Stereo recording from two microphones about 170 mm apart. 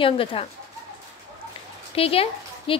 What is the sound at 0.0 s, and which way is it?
Speech, 30° left (ahead or behind).